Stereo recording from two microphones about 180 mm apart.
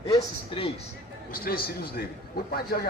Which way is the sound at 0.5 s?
30° left (ahead or behind).